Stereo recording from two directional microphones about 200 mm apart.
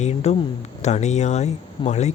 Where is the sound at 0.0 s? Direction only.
35° left (ahead or behind).